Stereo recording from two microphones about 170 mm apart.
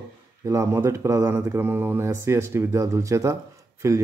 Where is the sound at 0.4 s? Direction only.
20° right (ahead or behind).